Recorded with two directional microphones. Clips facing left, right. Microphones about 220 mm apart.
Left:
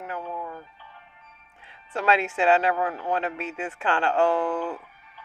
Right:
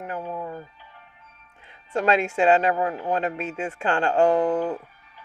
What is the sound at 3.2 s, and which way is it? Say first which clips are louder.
Speech: right 3 dB; 40° right (ahead or behind).